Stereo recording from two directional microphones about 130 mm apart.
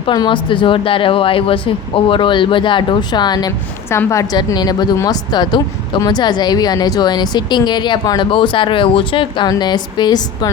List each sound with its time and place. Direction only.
0.0 s speech: 35° left (ahead or behind)